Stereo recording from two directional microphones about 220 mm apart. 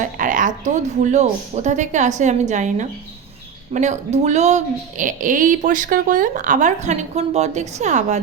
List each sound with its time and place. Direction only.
0.0 s speech: 35° right (ahead or behind)